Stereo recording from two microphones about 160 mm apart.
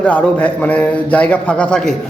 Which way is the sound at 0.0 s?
10° left (ahead or behind).